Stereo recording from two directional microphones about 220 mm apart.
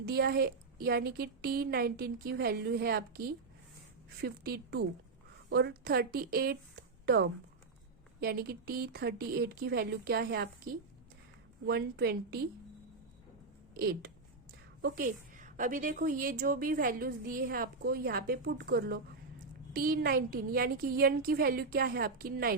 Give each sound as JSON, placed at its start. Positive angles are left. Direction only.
{"t": 0.0, "sound": "a woman's voice", "side_deg": -45}
{"t": 4.2, "sound": "a woman's voice", "side_deg": -45}
{"t": 13.7, "sound": "a woman's voice", "side_deg": -45}